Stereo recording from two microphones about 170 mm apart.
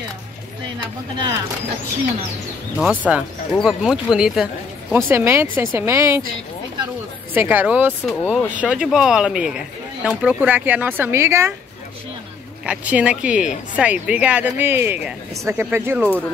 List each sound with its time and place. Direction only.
2.8 s speech: 10° right (ahead or behind)
4.9 s speech: 15° right (ahead or behind)
7.3 s speech: 10° right (ahead or behind)
12.6 s speech: 5° right (ahead or behind)